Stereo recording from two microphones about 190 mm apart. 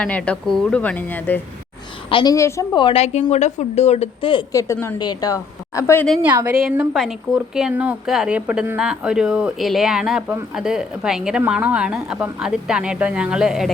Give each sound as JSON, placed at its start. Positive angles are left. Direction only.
{"t": 0.0, "sound": "speech", "side_deg": 5}
{"t": 2.0, "sound": "a woman's voice", "side_deg": 25}
{"t": 2.3, "sound": "speech", "side_deg": 15}
{"t": 2.8, "sound": "a woman's voice", "side_deg": 30}
{"t": 6.2, "sound": "a woman's voice", "side_deg": -10}